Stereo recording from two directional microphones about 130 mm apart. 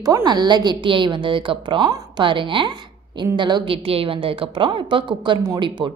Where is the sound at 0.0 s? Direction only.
30° right (ahead or behind).